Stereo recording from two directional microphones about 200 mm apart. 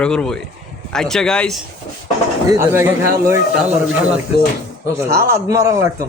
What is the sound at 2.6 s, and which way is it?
Speech, 10° right (ahead or behind).